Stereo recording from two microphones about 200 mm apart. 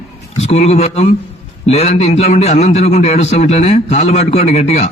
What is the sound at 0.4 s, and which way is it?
A man's voice, 30° left (ahead or behind).